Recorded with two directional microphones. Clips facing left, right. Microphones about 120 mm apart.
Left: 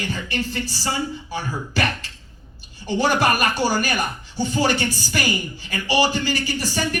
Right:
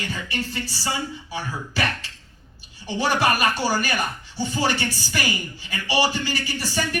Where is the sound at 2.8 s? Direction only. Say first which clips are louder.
Left 2 dB; 50° left (ahead or behind).